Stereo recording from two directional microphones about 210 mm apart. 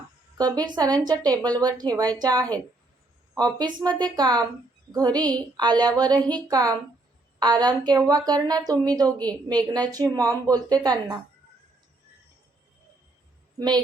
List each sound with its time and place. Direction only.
0.3 s a woman's voice: 20° right (ahead or behind)
9.0 s a woman's voice: 5° left (ahead or behind)
9.7 s a woman's voice: 20° right (ahead or behind)